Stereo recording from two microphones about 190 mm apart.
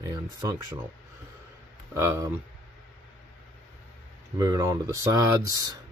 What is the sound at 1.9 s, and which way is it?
Speech, 15° right (ahead or behind).